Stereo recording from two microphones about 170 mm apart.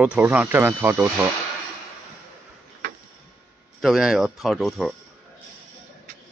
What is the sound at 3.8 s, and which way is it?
Speech, centre (ahead or behind).